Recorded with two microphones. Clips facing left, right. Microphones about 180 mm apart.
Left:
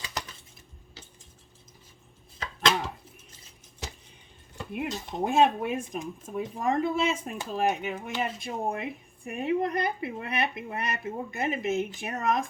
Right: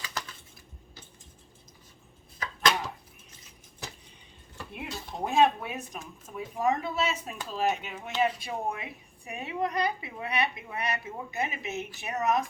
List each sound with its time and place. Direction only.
0.0 s coin: 20° left (ahead or behind)
4.5 s speech: 20° left (ahead or behind)
5.2 s a woman's voice: 50° left (ahead or behind)